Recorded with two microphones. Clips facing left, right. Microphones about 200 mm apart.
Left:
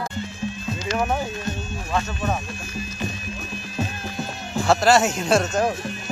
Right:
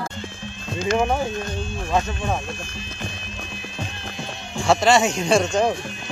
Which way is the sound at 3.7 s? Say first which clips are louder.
Left 6 dB; 5° left (ahead or behind).